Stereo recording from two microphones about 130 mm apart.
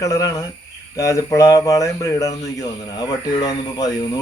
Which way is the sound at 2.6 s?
30° left (ahead or behind).